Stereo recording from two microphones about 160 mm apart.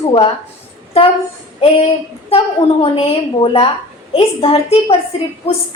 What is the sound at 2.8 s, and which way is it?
A woman's voice, 35° left (ahead or behind).